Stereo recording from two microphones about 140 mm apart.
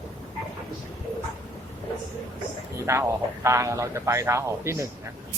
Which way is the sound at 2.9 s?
20° right (ahead or behind).